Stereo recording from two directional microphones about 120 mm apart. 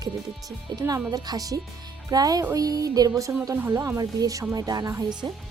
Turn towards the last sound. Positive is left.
turn(degrees=-30)  # may be behind; listen again after turning